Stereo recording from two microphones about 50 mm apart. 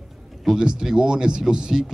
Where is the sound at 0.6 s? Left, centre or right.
Centre.